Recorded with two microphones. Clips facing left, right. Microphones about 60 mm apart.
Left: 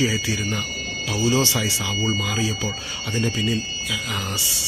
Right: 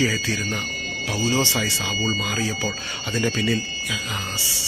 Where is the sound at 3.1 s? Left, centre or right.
Right.